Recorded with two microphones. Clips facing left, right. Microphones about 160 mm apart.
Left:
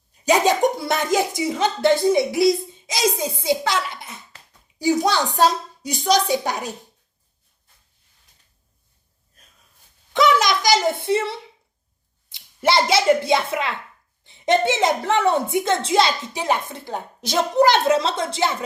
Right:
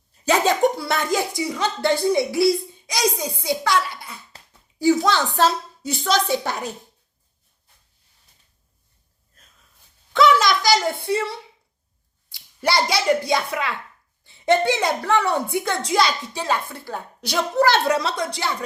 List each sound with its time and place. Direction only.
0.3 s a woman's voice: 15° left (ahead or behind)
10.1 s a sound: 20° left (ahead or behind)
12.3 s a child's voice: 20° left (ahead or behind)